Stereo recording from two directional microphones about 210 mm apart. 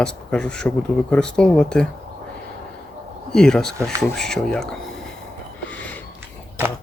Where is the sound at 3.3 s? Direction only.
5° left (ahead or behind).